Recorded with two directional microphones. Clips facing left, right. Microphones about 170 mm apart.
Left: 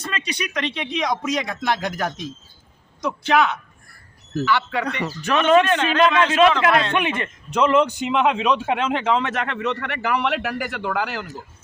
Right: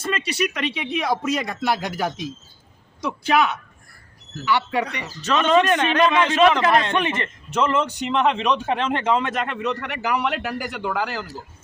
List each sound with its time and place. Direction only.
0.0 s speech: 5° right (ahead or behind)
4.9 s speech: 55° left (ahead or behind)
5.2 s speech: 10° left (ahead or behind)
5.7 s speech: 15° right (ahead or behind)
6.9 s a man's voice: 10° left (ahead or behind)